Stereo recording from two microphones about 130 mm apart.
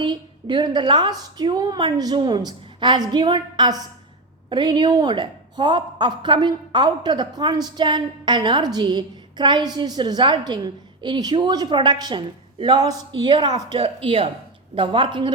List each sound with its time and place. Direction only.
0.0 s a woman's voice: 35° right (ahead or behind)
13.7 s a woman's voice: 45° right (ahead or behind)